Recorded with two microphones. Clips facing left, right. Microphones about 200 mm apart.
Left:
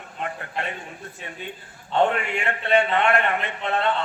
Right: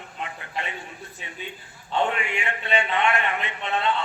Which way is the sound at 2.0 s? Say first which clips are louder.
Left 4 dB; 55° left (ahead or behind).